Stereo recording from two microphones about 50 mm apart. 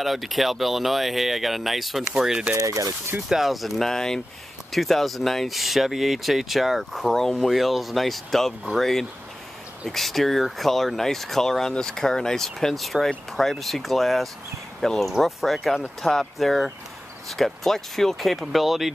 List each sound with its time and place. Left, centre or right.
0.0 s speech: centre
2.5 s speech: right
3.3 s speech: centre